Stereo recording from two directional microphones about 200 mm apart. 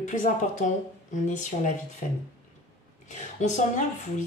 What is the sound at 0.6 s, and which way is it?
Speech, 40° left (ahead or behind).